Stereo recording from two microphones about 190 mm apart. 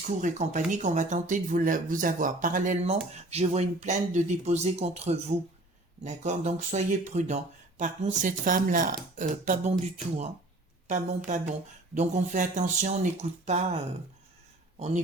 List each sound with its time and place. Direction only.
0.1 s speech: 40° right (ahead or behind)
10.9 s speech: 40° right (ahead or behind)